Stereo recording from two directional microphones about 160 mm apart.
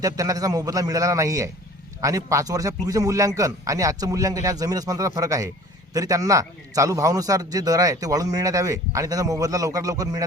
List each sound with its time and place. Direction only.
0.0 s a man's voice: 20° right (ahead or behind)